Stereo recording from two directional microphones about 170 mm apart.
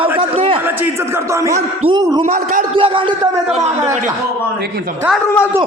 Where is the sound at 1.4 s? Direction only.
20° right (ahead or behind).